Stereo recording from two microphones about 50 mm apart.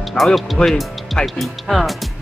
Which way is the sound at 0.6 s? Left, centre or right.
Centre.